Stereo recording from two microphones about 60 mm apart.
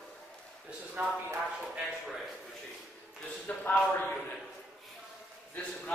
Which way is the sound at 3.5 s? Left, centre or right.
Left.